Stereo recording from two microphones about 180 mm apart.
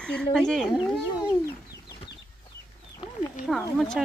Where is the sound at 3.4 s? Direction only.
45° left (ahead or behind).